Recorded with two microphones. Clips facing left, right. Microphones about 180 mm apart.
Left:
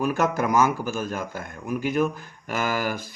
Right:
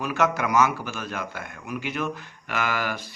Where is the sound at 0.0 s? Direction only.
45° left (ahead or behind).